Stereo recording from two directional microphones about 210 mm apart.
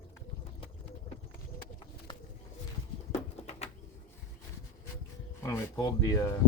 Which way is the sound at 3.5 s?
30° left (ahead or behind).